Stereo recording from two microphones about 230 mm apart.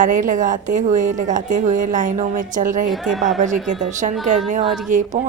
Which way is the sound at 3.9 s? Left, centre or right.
Right.